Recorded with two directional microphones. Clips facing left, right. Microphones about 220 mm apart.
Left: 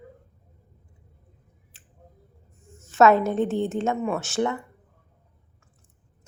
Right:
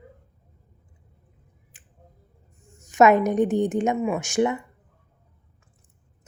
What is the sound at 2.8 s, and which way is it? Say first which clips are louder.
A woman's voice: right 1 dB; 15° right (ahead or behind).